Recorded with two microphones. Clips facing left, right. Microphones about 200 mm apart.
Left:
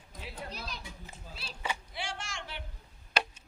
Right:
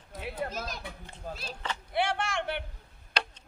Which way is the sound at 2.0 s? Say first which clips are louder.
Right 11 dB; 60° right (ahead or behind).